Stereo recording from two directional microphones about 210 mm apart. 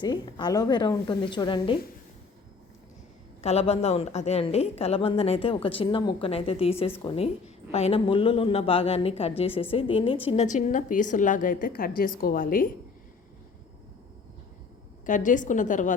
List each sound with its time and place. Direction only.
0.0 s a woman's voice: 20° left (ahead or behind)
3.4 s a woman's voice: 30° left (ahead or behind)
15.0 s a woman's voice: 40° left (ahead or behind)